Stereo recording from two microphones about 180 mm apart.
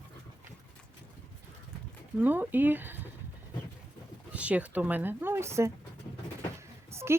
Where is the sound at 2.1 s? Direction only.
10° right (ahead or behind).